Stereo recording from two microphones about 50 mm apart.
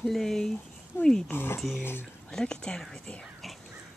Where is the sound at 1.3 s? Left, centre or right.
Left.